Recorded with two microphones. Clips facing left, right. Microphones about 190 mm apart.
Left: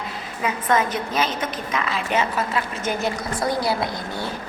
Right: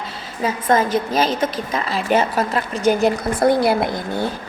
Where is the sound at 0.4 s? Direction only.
30° right (ahead or behind).